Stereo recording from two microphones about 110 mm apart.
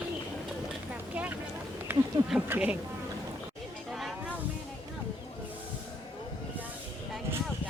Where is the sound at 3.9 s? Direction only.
Centre (ahead or behind).